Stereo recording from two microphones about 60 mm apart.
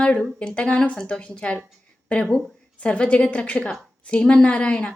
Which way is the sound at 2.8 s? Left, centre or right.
Centre.